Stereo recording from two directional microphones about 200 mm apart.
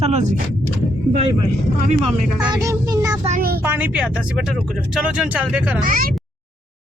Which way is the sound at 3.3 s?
45° right (ahead or behind).